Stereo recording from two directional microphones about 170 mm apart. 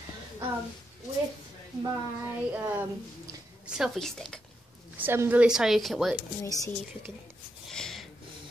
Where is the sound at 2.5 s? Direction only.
10° right (ahead or behind).